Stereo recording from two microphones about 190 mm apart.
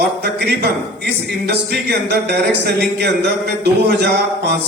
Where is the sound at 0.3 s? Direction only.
60° right (ahead or behind).